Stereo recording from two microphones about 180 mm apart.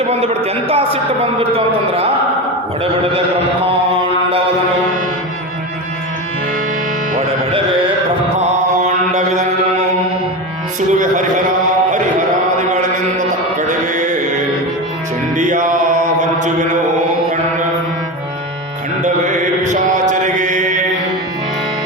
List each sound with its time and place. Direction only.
0.1 s a man's voice: 35° right (ahead or behind)
8.4 s mantra: 40° right (ahead or behind)
10.8 s a sound: 45° right (ahead or behind)
12.7 s music: 45° right (ahead or behind)
15.4 s music: 45° right (ahead or behind)
19.6 s mantra: 40° right (ahead or behind)